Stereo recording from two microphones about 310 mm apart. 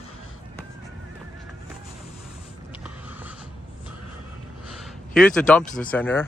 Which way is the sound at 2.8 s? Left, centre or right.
Centre.